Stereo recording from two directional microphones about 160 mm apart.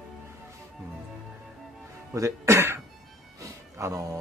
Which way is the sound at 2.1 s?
20° right (ahead or behind).